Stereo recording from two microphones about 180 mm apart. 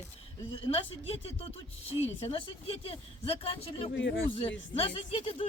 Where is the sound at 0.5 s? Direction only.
30° left (ahead or behind).